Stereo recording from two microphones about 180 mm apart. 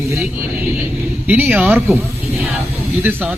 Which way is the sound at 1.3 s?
10° right (ahead or behind).